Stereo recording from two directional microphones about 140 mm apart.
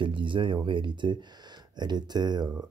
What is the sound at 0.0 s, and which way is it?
Speech, 35° right (ahead or behind).